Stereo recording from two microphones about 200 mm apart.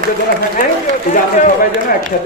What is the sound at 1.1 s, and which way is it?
Speech, 40° left (ahead or behind).